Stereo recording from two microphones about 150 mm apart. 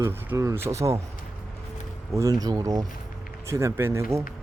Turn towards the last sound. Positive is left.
turn(degrees=-20)  # may be behind; listen again after turning